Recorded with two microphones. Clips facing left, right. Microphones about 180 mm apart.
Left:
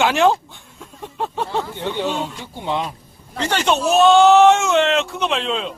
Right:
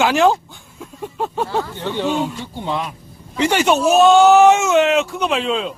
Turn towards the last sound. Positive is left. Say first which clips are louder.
# right 2 dB
turn(degrees=0)  # may be behind; listen again after turning